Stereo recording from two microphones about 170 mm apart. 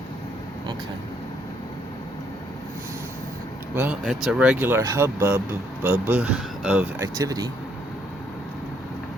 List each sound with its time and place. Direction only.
3.8 s speech: 5° right (ahead or behind)
7.2 s speech: 20° right (ahead or behind)